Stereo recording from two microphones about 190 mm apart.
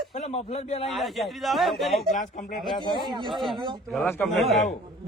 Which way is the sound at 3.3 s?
Centre (ahead or behind).